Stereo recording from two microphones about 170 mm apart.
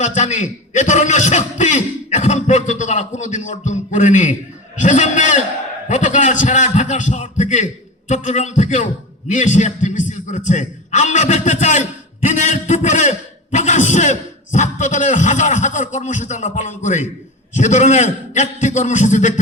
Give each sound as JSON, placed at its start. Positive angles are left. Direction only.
{"t": 0.0, "sound": "a man's voice", "side_deg": 45}